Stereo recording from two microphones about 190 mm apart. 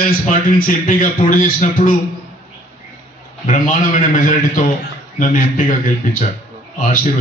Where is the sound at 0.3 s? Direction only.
45° left (ahead or behind).